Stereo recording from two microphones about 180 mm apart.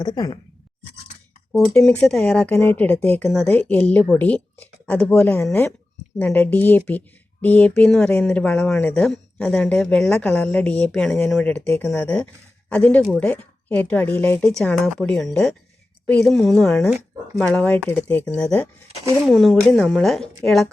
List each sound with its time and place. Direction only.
0.0 s speech: 20° left (ahead or behind)
1.5 s speech: 5° left (ahead or behind)